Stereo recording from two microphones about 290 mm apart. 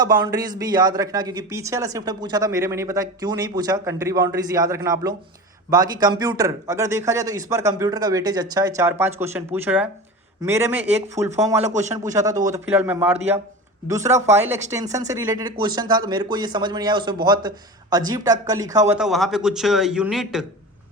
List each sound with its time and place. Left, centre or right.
0.0 s a man's voice: centre
11.7 s a man's voice: right
12.0 s a man's voice: centre